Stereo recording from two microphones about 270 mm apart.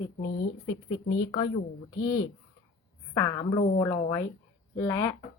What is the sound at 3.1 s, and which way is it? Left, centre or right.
Speech, centre.